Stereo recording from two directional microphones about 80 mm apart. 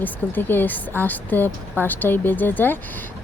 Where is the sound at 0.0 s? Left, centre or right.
Left.